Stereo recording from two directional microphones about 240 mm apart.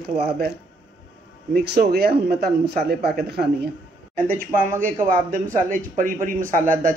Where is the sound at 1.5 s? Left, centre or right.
Right.